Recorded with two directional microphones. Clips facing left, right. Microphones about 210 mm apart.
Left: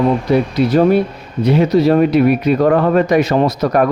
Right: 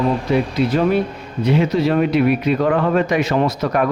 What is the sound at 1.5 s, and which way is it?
Speech, 40° left (ahead or behind).